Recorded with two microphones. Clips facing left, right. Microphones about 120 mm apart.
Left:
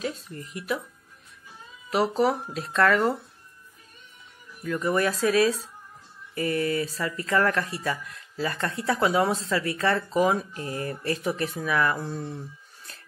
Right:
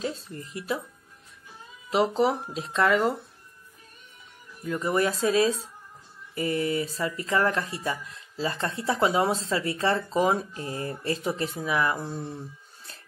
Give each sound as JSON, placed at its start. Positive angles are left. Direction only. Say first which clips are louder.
{"t": 0.0, "sound": "speech", "louder": "even", "side_deg": -30}
{"t": 1.9, "sound": "speech", "louder": "even", "side_deg": -20}
{"t": 4.6, "sound": "speech", "louder": "left 1 dB", "side_deg": -25}